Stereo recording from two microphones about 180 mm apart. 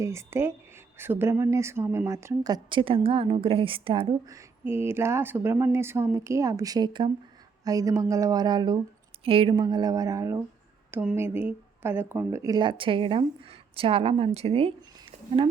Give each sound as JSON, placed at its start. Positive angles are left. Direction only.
{"t": 0.0, "sound": "speech", "side_deg": -15}
{"t": 4.3, "sound": "speech", "side_deg": -15}